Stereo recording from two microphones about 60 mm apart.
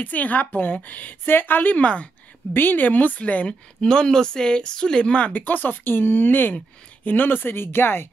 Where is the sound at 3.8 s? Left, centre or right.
Centre; by 8.1 s left.